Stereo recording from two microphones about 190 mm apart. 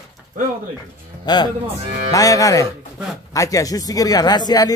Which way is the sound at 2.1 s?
20° left (ahead or behind).